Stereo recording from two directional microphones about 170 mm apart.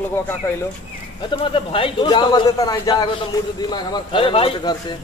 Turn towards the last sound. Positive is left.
turn(degrees=35)  # may be behind; listen again after turning